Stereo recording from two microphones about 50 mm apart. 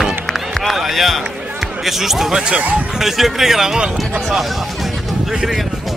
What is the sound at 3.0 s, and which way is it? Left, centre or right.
Speech, centre.